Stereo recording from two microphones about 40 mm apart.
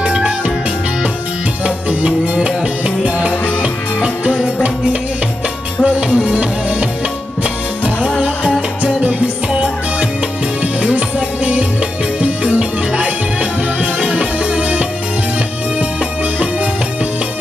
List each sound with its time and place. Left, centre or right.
0.0 s music: right
1.6 s music: right
6.0 s music: right
10.6 s music: right